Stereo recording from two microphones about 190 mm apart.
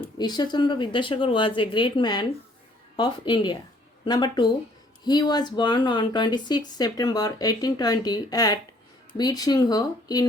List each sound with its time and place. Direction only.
0.2 s speech: 20° left (ahead or behind)